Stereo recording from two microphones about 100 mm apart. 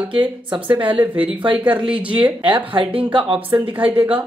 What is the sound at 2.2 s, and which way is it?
A woman's voice, 55° right (ahead or behind).